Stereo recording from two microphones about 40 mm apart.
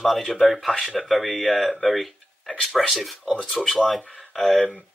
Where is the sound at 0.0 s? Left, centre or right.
Centre.